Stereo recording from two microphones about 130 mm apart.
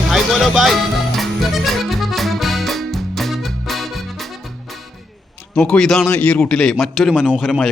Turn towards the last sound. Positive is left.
turn(degrees=0)  # may be behind; listen again after turning